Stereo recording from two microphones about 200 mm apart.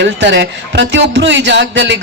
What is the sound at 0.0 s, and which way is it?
A man's voice, 65° right (ahead or behind).